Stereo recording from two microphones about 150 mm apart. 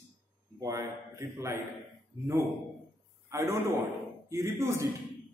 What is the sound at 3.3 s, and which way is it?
A man's voice, 20° right (ahead or behind).